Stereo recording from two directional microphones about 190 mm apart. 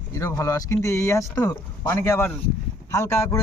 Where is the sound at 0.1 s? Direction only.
15° left (ahead or behind).